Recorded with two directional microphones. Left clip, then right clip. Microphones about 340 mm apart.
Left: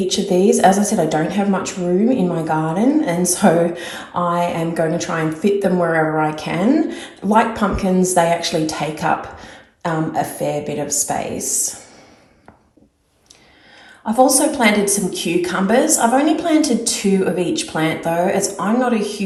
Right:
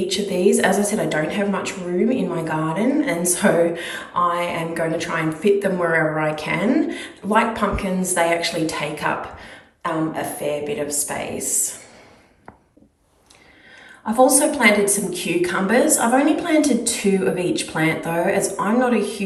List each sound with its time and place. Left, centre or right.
0.1 s a woman's voice: centre
10.2 s a woman's voice: centre
14.1 s a woman's voice: centre